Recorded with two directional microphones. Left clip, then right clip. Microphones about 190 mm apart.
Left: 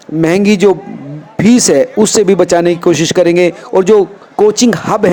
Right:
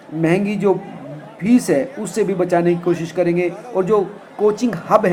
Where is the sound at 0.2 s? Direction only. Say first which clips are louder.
Left 9 dB; 60° left (ahead or behind).